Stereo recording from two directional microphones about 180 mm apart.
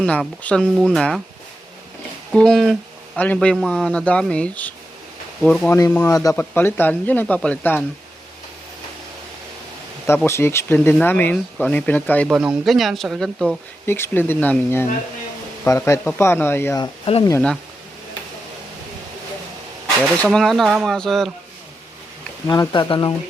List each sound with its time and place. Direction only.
0.0 s speech: 5° left (ahead or behind)
2.3 s speech: 5° left (ahead or behind)
6.1 s speech: 20° left (ahead or behind)
10.1 s speech: 15° left (ahead or behind)
13.8 s speech: 15° left (ahead or behind)
20.0 s speech: 5° left (ahead or behind)
22.4 s speech: 20° left (ahead or behind)